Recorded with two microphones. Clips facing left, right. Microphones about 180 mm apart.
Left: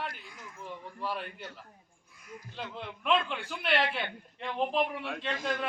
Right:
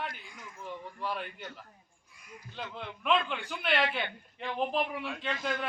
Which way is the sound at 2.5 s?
Centre (ahead or behind).